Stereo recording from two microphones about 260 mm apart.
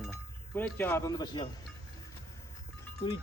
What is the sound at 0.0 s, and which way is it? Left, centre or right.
Speech, centre.